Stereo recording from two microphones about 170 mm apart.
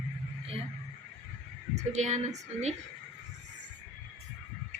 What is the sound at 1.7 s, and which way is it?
Speech, 40° right (ahead or behind).